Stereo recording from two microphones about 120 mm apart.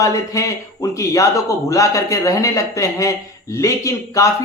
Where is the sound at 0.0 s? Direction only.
25° left (ahead or behind).